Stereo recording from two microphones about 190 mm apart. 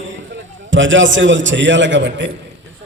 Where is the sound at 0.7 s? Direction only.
80° right.